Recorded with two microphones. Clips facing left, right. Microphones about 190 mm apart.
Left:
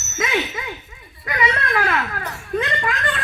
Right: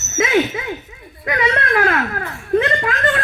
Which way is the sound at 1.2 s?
55° right (ahead or behind).